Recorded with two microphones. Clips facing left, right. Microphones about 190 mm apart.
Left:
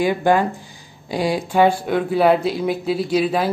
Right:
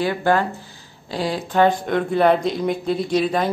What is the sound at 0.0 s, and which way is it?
Speech, 15° left (ahead or behind).